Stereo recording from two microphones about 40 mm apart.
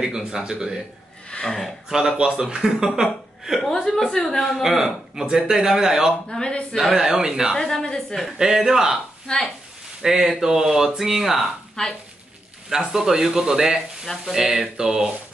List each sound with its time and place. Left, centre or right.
0.0 s speech: centre
1.3 s speech: left
1.9 s speech: centre
3.7 s a woman's voice: centre
4.6 s speech: centre
6.2 s speech: left
6.8 s speech: centre
7.5 s a woman's voice: centre
8.4 s speech: centre
9.3 s speech: centre
10.0 s speech: centre
12.6 s speech: centre